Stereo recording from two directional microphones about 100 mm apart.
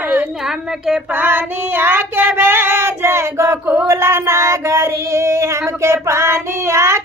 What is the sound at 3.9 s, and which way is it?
Female singing, 30° right (ahead or behind).